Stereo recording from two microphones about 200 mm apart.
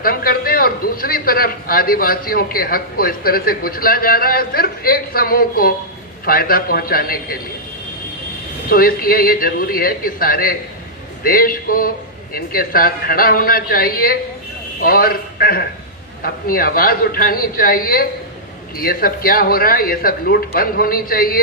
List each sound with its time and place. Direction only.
0.0 s a man's voice: 45° left (ahead or behind)
8.7 s a man's voice: 45° left (ahead or behind)